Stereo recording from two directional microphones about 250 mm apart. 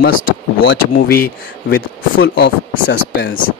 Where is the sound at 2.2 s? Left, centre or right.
Left.